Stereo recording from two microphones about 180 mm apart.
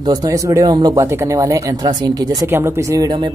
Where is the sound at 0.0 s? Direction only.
20° right (ahead or behind).